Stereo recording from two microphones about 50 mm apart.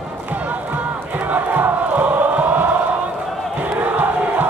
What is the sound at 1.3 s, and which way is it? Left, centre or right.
Crowd, right.